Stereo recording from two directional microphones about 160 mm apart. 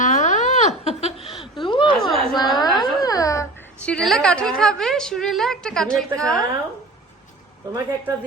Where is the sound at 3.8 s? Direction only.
5° left (ahead or behind).